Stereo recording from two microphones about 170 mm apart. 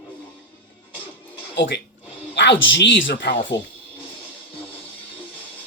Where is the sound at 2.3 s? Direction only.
90° left.